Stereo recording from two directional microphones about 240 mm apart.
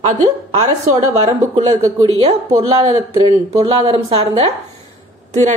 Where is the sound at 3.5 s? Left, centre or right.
Right.